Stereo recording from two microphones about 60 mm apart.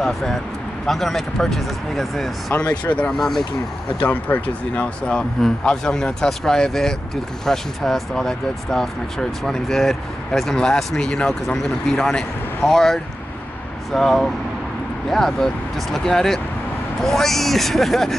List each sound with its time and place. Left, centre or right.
0.0 s speech: centre
2.7 s speech: centre
3.2 s speech: centre
4.0 s speech: left; by 18.1 s centre